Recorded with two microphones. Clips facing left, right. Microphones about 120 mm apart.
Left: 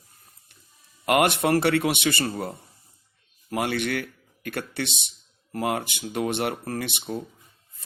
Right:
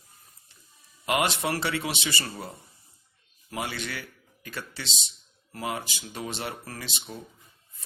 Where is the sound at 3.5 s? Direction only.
60° left (ahead or behind).